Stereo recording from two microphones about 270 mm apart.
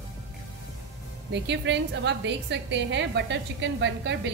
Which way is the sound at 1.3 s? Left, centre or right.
Right.